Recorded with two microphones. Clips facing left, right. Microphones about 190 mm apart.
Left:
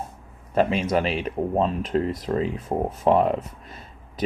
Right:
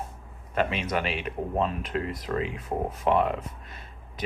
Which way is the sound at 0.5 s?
35° left (ahead or behind).